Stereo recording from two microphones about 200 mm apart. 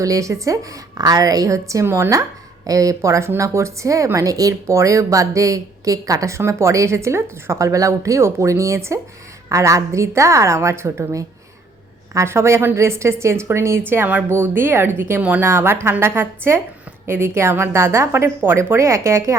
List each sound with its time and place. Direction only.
0.0 s a woman's voice: 15° right (ahead or behind)